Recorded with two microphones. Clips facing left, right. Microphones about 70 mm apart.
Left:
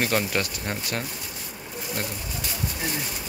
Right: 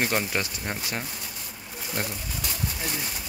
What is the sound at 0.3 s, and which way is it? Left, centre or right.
Speech, centre.